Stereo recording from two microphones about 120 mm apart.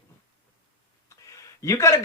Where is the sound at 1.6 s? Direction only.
25° left (ahead or behind).